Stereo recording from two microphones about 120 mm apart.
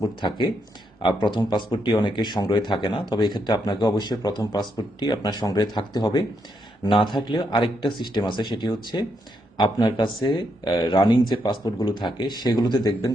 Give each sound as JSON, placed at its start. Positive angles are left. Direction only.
{"t": 0.0, "sound": "speech", "side_deg": 40}